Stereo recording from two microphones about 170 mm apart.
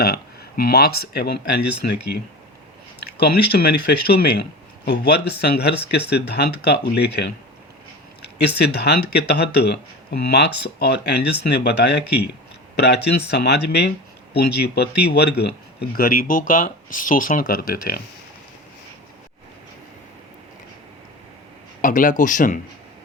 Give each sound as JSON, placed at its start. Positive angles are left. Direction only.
{"t": 0.0, "sound": "speech", "side_deg": 65}
{"t": 8.4, "sound": "speech", "side_deg": 80}
{"t": 21.8, "sound": "speech", "side_deg": 50}